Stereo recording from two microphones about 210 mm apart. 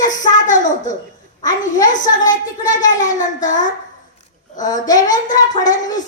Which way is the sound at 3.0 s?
35° left (ahead or behind).